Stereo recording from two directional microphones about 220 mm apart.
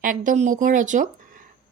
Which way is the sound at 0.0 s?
35° right (ahead or behind).